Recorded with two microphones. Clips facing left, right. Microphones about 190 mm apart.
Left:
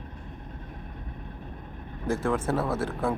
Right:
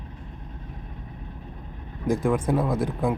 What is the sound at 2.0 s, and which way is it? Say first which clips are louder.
Speech: right 4 dB; 15° right (ahead or behind).